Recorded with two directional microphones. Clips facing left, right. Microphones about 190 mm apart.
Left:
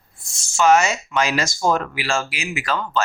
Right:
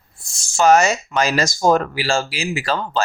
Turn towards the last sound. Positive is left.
turn(degrees=-30)  # may be behind; listen again after turning